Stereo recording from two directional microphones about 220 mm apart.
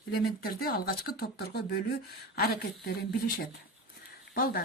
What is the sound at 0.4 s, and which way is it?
Speech, 45° left (ahead or behind).